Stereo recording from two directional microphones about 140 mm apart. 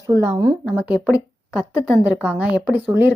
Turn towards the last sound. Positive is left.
turn(degrees=-15)  # may be behind; listen again after turning